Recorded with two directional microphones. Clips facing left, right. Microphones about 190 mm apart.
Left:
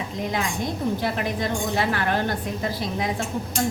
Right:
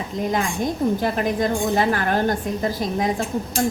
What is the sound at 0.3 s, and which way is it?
A woman's voice, 45° right (ahead or behind).